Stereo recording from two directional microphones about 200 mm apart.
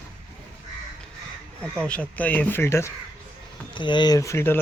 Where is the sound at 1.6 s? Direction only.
5° left (ahead or behind).